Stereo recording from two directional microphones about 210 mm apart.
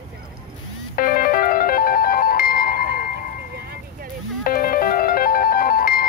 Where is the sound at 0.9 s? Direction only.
40° left (ahead or behind).